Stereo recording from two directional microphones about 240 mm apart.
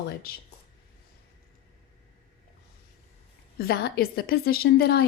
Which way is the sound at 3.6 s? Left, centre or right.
Left.